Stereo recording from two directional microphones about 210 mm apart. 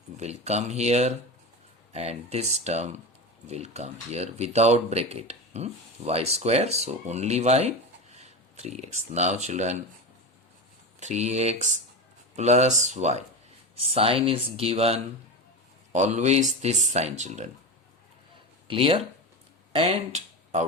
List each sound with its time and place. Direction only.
0.2 s speech: 30° right (ahead or behind)
11.0 s speech: 35° right (ahead or behind)
18.7 s speech: 25° right (ahead or behind)